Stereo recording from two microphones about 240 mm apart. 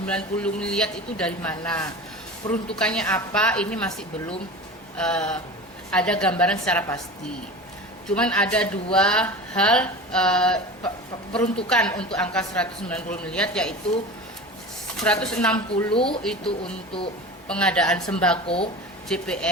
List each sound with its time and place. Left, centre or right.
0.0 s a woman's voice: centre
8.0 s a woman's voice: centre
15.0 s a woman's voice: centre
15.9 s speech: left
16.2 s a woman's voice: centre
18.4 s speech: left
19.0 s speech: centre